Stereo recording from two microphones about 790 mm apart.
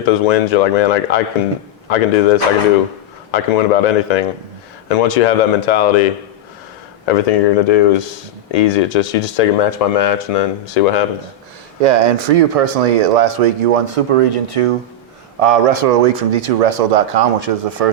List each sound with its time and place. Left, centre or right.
0.0 s speech: left
11.8 s speech: right
12.5 s speech: right